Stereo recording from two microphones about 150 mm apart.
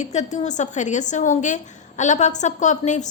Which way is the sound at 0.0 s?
50° left (ahead or behind).